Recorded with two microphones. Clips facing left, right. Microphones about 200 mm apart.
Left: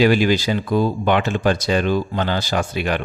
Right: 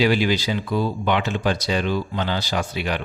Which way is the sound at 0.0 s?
50° left (ahead or behind).